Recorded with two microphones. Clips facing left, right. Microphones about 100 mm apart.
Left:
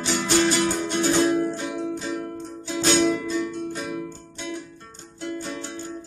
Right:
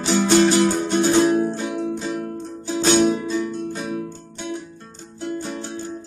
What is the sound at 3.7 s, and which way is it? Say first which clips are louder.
Music: right 3 dB; 30° right (ahead or behind).